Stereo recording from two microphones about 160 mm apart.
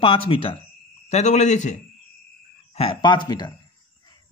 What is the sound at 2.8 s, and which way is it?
Speech, 30° left (ahead or behind).